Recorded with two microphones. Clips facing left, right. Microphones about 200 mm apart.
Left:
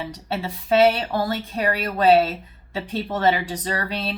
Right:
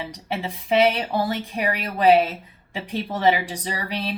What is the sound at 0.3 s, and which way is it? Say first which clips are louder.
Speech: left 2 dB; 15° right (ahead or behind).